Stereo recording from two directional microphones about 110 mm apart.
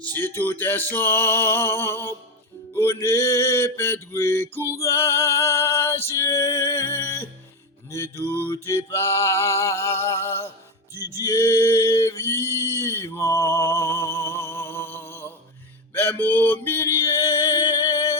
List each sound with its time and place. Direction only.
0.0 s speech: 20° left (ahead or behind)
0.9 s music: 20° left (ahead or behind)
11.2 s a sound: 30° left (ahead or behind)
16.0 s male singing: 20° left (ahead or behind)